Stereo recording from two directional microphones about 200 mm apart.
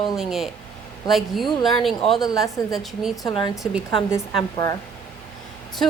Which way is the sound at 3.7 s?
5° right (ahead or behind).